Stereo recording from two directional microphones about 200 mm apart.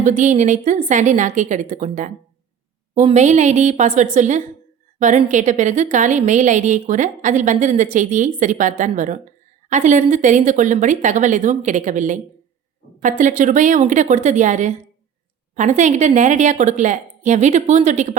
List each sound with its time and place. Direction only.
0.0 s a woman's voice: 35° right (ahead or behind)